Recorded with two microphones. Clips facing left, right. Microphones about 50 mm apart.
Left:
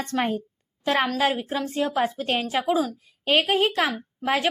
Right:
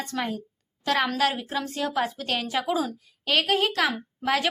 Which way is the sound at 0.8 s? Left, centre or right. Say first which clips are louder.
Left 2 dB; left.